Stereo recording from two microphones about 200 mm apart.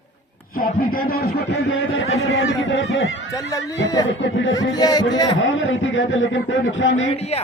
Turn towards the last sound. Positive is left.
turn(degrees=30)  # may be behind; listen again after turning